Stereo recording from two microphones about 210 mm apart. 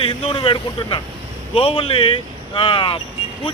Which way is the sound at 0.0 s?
25° left (ahead or behind).